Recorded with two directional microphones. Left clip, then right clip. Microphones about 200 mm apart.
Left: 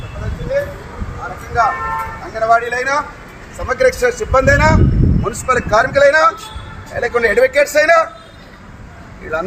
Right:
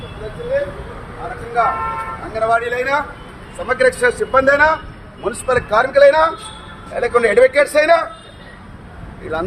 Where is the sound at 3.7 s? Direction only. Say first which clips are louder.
Left 1 dB; 10° right (ahead or behind).